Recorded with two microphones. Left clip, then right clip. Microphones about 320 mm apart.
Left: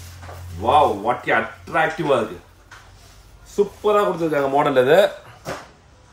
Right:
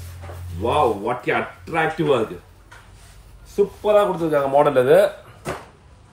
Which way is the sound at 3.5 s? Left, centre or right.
Centre.